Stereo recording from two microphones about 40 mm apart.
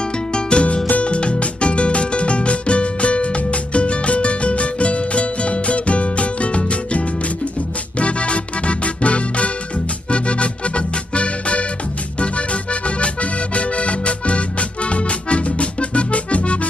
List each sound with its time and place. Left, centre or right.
0.3 s music: left
8.0 s music: left
12.2 s accordion: left